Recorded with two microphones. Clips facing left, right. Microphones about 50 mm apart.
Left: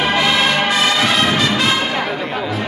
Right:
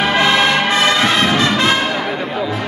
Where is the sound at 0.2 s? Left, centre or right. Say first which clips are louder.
Right 2 dB; right.